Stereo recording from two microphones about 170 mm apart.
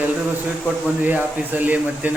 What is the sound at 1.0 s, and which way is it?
Speech, 10° right (ahead or behind).